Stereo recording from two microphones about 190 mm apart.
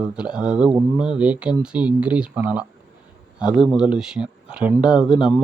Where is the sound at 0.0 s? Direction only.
5° right (ahead or behind).